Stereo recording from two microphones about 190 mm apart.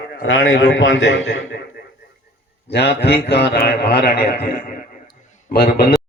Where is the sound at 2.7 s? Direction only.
60° left (ahead or behind).